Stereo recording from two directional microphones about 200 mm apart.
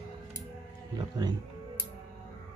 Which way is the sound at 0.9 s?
20° right (ahead or behind).